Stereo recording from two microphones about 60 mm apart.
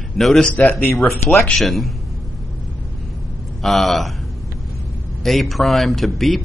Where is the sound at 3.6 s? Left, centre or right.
Centre.